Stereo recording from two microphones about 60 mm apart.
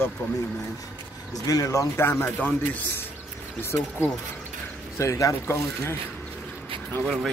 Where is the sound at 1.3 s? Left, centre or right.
Left.